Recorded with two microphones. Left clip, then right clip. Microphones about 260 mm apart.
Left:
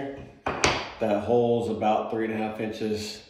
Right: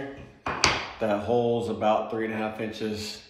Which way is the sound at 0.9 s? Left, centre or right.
Centre.